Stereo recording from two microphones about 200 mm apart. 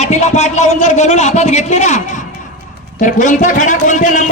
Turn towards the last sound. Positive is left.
turn(degrees=40)  # may be behind; listen again after turning